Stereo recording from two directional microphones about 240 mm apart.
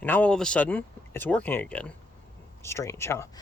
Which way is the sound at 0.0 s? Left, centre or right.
Centre.